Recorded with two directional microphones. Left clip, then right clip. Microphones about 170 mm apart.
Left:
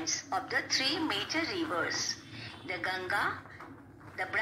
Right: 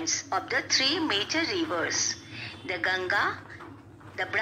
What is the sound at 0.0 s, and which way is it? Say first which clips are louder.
A woman's voice: right 5 dB; 20° right (ahead or behind).